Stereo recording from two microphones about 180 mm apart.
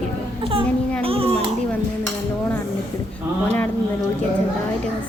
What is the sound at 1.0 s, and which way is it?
Speech, 30° right (ahead or behind).